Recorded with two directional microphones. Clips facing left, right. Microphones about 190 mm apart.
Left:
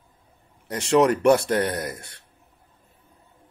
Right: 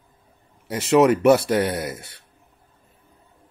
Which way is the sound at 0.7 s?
5° right (ahead or behind).